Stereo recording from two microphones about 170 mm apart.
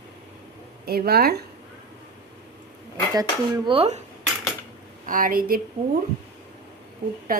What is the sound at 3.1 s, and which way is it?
Speech, 20° right (ahead or behind).